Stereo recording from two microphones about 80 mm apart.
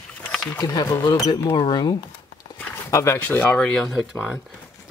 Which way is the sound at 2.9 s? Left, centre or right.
Left.